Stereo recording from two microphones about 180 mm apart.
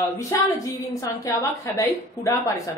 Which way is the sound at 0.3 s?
20° left (ahead or behind).